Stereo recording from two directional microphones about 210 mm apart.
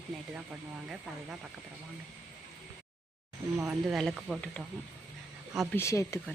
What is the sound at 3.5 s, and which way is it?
Speech, 5° right (ahead or behind).